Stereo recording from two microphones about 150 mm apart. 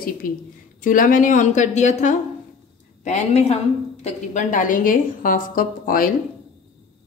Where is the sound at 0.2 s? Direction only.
70° left (ahead or behind).